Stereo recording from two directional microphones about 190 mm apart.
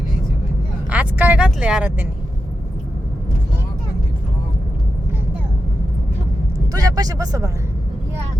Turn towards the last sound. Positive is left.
turn(degrees=-20)  # may be behind; listen again after turning